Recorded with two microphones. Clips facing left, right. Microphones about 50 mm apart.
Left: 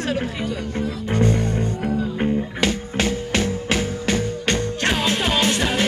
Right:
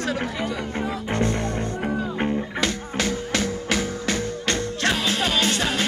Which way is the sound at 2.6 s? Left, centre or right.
Left.